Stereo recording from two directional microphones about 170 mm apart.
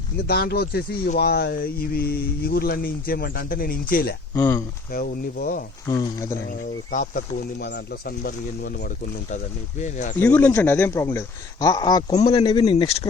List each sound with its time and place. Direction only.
0.3 s speech: 65° left (ahead or behind)
5.9 s speech: 20° left (ahead or behind)
6.9 s speech: 50° left (ahead or behind)
7.6 s speech: 65° left (ahead or behind)
9.3 s speech: 45° left (ahead or behind)
10.2 s speech: 10° left (ahead or behind); by 13.1 s 35° left (ahead or behind)